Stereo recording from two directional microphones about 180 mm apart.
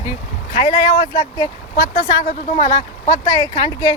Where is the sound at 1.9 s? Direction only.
40° left (ahead or behind).